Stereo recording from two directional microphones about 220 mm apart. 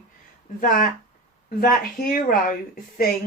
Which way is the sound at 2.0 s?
40° left (ahead or behind).